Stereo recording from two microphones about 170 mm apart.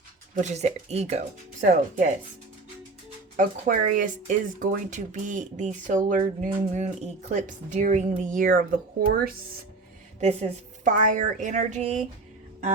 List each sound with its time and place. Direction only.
0.3 s speech: 40° right (ahead or behind)
3.3 s speech: 55° right (ahead or behind)
10.2 s speech: 40° right (ahead or behind)